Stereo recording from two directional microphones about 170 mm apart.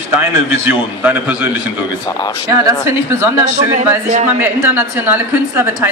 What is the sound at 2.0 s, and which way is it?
Speech, 25° left (ahead or behind).